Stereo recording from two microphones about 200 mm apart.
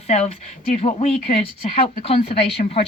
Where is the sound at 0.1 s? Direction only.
30° left (ahead or behind).